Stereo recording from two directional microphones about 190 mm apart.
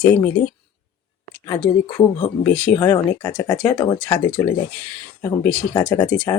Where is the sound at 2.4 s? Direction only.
5° left (ahead or behind).